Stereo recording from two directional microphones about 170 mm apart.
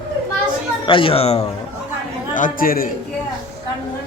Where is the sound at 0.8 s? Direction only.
30° left (ahead or behind).